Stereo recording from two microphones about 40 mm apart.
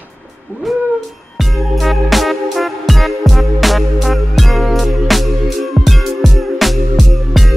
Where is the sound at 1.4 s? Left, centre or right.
Centre.